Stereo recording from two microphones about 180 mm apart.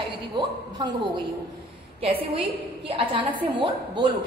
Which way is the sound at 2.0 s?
30° right (ahead or behind).